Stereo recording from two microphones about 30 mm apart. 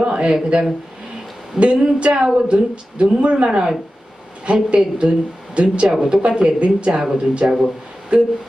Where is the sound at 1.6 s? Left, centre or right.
Right.